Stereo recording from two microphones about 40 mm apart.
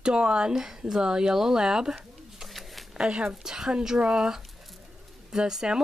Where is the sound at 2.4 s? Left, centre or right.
Centre.